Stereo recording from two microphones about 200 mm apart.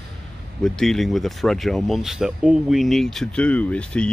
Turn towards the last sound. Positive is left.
turn(degrees=5)  # may be behind; listen again after turning